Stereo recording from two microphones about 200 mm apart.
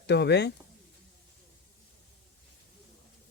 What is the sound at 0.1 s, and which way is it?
Speech, 60° left (ahead or behind).